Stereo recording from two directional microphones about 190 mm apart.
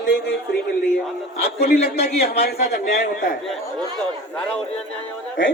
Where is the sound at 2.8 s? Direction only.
45° left (ahead or behind).